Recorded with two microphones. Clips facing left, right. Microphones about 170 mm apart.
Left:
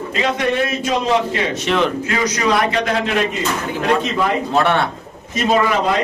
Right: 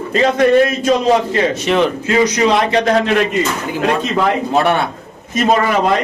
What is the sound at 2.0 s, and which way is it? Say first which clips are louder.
Speech: right 5 dB; 25° right (ahead or behind).